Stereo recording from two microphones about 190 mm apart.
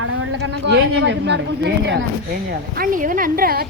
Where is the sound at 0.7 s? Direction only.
75° right (ahead or behind).